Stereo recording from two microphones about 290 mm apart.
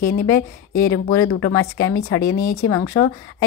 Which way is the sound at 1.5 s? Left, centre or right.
Centre.